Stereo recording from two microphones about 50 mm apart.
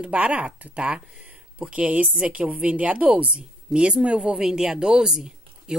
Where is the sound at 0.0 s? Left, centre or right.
Right.